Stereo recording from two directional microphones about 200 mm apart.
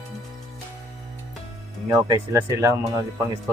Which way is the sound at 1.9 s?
20° right (ahead or behind).